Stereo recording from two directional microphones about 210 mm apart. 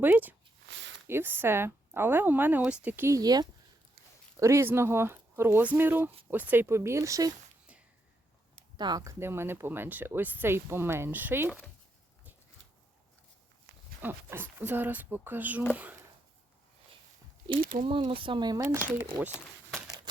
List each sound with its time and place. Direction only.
0.0 s speech: 10° right (ahead or behind)
0.7 s a sound: 60° right (ahead or behind)
1.0 s speech: 10° right (ahead or behind)
8.5 s speech: 20° right (ahead or behind)
14.0 s speech: 10° right (ahead or behind)
17.6 s speech: 40° right (ahead or behind)
17.8 s speech: 25° right (ahead or behind)